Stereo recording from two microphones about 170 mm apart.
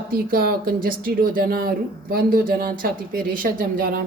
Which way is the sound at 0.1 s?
60° right (ahead or behind).